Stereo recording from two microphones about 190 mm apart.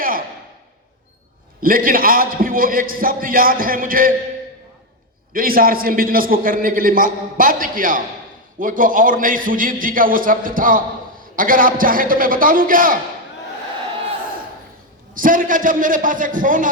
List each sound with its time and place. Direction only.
1.6 s a man's voice: 50° right (ahead or behind)
5.3 s a man's voice: 50° right (ahead or behind)
15.1 s a man's voice: 45° right (ahead or behind)